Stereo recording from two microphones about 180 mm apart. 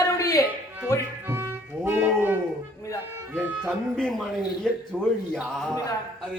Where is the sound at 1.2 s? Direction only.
15° right (ahead or behind).